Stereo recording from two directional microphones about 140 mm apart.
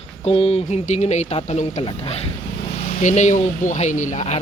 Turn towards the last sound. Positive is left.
turn(degrees=55)  # may be behind; listen again after turning